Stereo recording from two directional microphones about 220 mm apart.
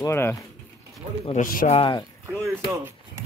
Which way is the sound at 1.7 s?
20° left (ahead or behind).